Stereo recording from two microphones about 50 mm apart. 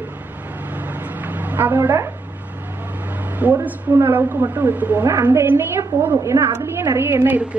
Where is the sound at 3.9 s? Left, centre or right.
Right.